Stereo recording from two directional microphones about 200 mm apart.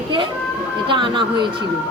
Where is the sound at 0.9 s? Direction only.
25° right (ahead or behind).